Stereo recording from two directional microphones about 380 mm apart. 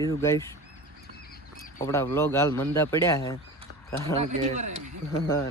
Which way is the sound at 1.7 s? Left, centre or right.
Centre.